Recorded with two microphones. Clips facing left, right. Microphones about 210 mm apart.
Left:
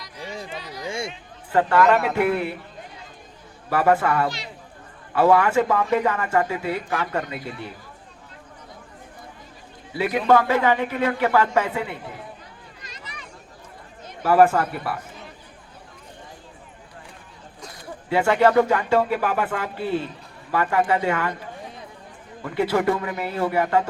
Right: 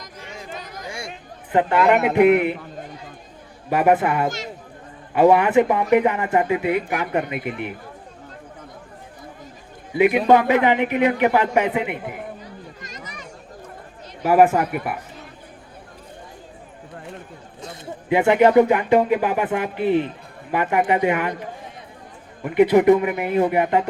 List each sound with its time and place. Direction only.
0.4 s a sound: 45° right (ahead or behind)
0.9 s a sound: 25° left (ahead or behind)
1.5 s speech: 20° right (ahead or behind)
3.7 s speech: 20° right (ahead or behind)
4.3 s speech: 45° right (ahead or behind)
5.1 s speech: 20° right (ahead or behind)
9.9 s speech: 20° right (ahead or behind)
12.8 s a sound: 45° right (ahead or behind)
14.2 s a man's voice: 15° right (ahead or behind)
17.6 s speech: 25° right (ahead or behind)
22.4 s speech: 20° right (ahead or behind)